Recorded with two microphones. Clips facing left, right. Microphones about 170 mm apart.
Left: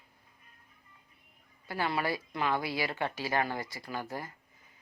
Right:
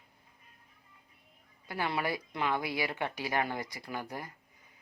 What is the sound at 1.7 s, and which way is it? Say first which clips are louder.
A woman's voice: left 1 dB; 20° right (ahead or behind).